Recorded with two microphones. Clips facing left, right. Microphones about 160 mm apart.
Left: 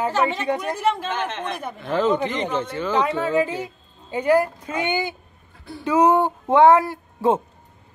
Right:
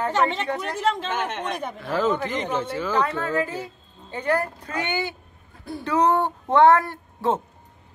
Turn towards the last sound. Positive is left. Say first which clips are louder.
# left 4 dB
turn(degrees=10)  # may be behind; listen again after turning